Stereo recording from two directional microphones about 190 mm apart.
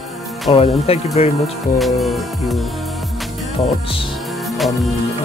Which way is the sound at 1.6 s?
Centre (ahead or behind).